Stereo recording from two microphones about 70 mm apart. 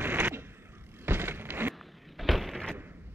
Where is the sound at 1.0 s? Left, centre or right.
Right.